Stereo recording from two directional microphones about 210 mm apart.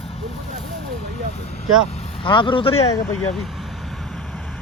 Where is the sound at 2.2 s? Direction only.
25° left (ahead or behind).